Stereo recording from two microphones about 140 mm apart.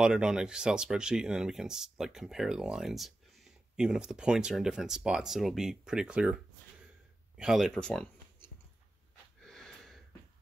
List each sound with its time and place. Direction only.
0.0 s speech: 5° right (ahead or behind)
9.4 s wheeze: 5° left (ahead or behind)